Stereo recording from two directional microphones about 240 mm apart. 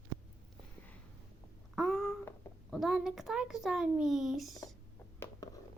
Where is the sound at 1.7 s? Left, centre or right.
Centre.